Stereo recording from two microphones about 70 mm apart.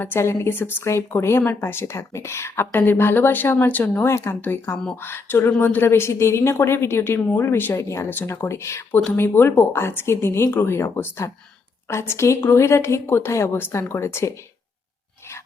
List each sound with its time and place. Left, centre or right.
0.0 s speech: left
7.8 s speech: left